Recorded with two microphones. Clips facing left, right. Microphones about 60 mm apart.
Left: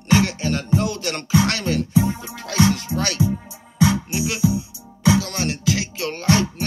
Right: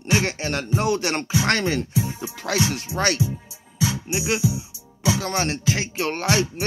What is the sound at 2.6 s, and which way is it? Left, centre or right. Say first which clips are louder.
Speech: left 9 dB; left.